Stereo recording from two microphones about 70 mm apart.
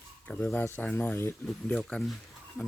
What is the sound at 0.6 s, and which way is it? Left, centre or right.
Speech, left.